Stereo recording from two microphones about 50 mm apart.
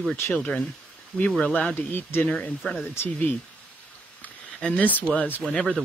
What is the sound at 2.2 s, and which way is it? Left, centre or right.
Speech, left.